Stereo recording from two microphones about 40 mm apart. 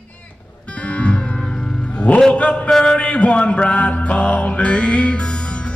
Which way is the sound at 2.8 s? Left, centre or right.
Left.